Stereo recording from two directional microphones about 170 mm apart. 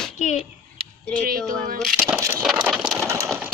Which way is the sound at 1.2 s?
55° right (ahead or behind).